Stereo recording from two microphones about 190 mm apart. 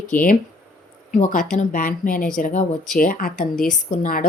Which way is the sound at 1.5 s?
45° left (ahead or behind).